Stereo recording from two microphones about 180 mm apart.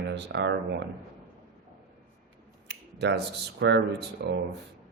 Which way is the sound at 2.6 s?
70° right (ahead or behind).